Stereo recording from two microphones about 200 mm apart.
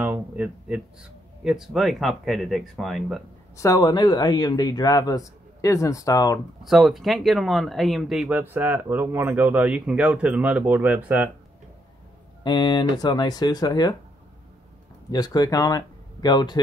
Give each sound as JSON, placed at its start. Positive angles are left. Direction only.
{"t": 0.0, "sound": "a sound", "side_deg": -5}
{"t": 1.4, "sound": "speech", "side_deg": 0}
{"t": 3.5, "sound": "a man's voice", "side_deg": 15}
{"t": 6.6, "sound": "speech", "side_deg": 0}
{"t": 12.4, "sound": "a man's voice", "side_deg": 20}
{"t": 15.0, "sound": "speech", "side_deg": 20}